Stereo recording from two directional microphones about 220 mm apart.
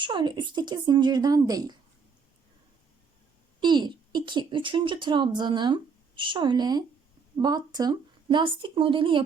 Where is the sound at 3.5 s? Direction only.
20° right (ahead or behind).